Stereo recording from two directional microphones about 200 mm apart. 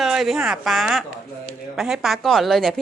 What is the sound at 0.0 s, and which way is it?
A woman's voice, centre (ahead or behind).